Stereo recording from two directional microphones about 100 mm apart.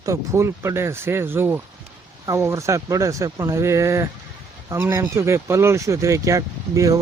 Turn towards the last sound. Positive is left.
turn(degrees=-35)  # may be behind; listen again after turning